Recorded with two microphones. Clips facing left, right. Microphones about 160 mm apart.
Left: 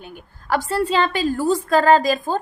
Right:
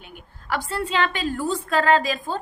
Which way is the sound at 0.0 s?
40° left (ahead or behind).